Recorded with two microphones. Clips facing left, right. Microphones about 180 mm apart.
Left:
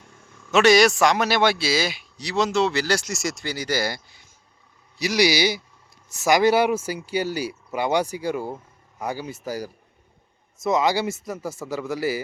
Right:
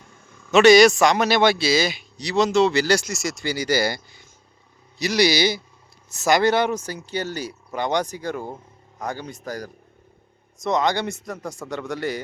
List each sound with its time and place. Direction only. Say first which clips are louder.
0.5 s a man's voice: right 4 dB; 5° left (ahead or behind)